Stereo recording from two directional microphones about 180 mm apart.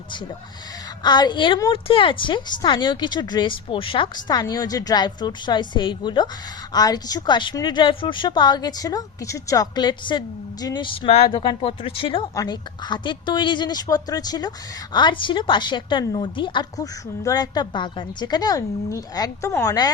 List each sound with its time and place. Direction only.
1.0 s a woman's voice: 25° left (ahead or behind)